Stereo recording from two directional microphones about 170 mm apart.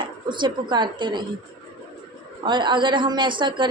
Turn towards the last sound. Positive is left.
turn(degrees=-30)  # may be behind; listen again after turning